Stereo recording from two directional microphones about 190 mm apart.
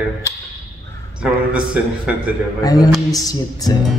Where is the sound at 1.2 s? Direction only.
5° right (ahead or behind).